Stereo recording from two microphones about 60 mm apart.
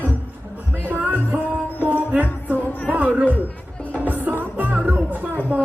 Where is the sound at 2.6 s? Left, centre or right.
Left.